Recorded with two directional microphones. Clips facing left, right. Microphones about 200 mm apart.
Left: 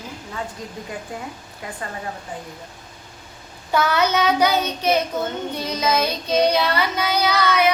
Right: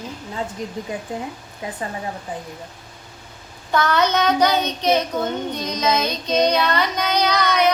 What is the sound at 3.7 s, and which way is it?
Child singing, 10° left (ahead or behind).